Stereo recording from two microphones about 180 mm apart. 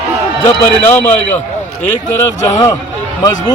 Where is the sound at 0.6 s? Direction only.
10° left (ahead or behind).